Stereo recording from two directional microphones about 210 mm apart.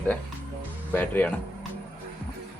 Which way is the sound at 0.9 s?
10° left (ahead or behind).